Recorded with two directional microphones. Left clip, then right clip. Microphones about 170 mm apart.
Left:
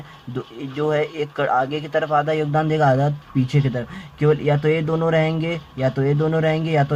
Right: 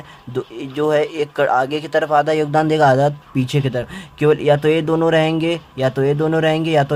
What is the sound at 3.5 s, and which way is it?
Speech, 35° right (ahead or behind).